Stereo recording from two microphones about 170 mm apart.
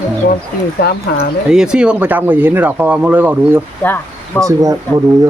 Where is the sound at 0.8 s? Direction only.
65° left (ahead or behind).